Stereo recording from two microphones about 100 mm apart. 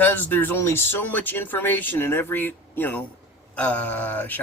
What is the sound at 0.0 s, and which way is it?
Speech, 20° left (ahead or behind).